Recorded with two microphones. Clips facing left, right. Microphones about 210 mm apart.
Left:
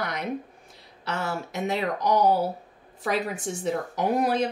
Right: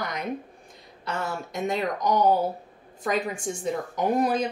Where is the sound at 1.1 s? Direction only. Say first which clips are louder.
Left 1 dB; 5° left (ahead or behind).